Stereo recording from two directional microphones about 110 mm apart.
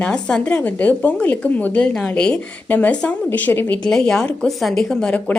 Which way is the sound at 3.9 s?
5° left (ahead or behind).